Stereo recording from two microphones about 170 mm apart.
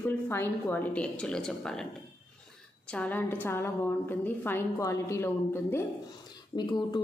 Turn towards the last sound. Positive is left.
turn(degrees=25)  # may be behind; listen again after turning